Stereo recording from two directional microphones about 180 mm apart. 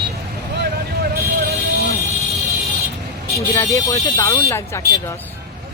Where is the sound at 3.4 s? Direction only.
15° left (ahead or behind).